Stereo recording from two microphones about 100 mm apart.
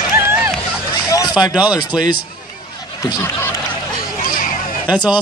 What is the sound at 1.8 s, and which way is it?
Speech, 45° left (ahead or behind).